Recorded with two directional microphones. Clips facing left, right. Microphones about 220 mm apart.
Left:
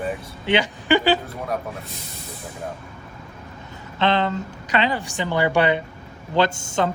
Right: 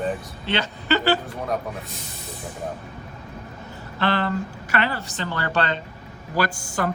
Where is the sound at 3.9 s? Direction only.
20° left (ahead or behind).